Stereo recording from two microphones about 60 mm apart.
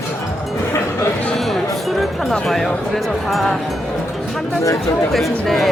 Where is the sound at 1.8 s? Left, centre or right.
Centre.